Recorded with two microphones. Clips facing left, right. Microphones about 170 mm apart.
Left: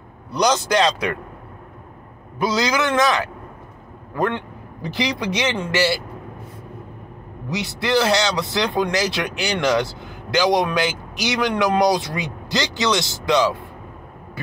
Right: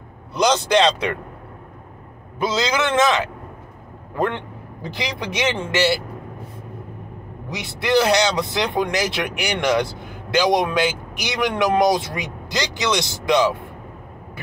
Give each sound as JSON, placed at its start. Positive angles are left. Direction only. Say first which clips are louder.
{"t": 0.3, "sound": "speech", "louder": "right 1 dB", "side_deg": -20}
{"t": 2.4, "sound": "speech", "louder": "left 1 dB", "side_deg": -25}
{"t": 4.9, "sound": "speech", "louder": "left 4 dB", "side_deg": -20}
{"t": 7.5, "sound": "speech", "louder": "right 1 dB", "side_deg": -20}
{"t": 12.4, "sound": "vehicle", "louder": "left 1 dB", "side_deg": -15}
{"t": 12.9, "sound": "speech", "louder": "right 2 dB", "side_deg": -20}